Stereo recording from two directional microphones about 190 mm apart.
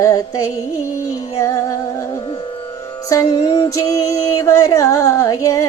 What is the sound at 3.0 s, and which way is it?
Music, 20° left (ahead or behind).